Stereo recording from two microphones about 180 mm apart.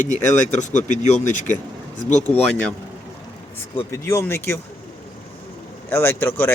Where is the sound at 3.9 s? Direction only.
15° left (ahead or behind).